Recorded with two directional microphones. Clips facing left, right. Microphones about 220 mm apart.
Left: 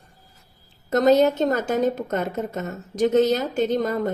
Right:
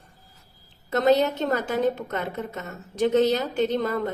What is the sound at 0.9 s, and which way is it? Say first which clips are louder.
A woman's voice: left 4 dB; 45° left (ahead or behind).